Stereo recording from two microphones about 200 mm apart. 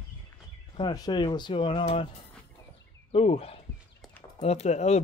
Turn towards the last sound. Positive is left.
turn(degrees=35)  # may be behind; listen again after turning